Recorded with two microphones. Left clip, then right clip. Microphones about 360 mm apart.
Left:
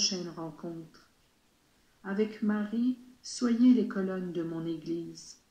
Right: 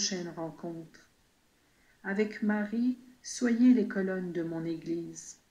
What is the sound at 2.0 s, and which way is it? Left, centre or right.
Speech, right.